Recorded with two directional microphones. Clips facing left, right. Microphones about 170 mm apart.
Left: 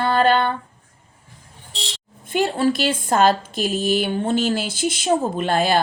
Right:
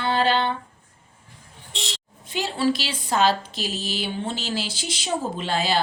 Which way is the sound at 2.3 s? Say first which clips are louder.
Left 4 dB; 50° left (ahead or behind).